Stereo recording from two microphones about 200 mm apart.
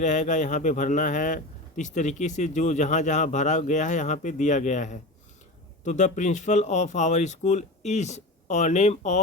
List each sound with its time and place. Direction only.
0.0 s speech: 35° left (ahead or behind)